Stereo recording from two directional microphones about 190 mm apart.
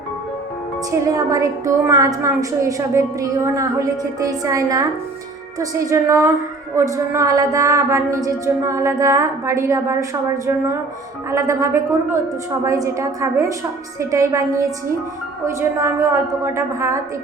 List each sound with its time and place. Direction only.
0.9 s a woman's voice: 15° right (ahead or behind)